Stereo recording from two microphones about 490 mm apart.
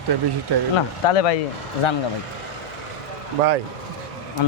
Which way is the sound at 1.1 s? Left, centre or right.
Left.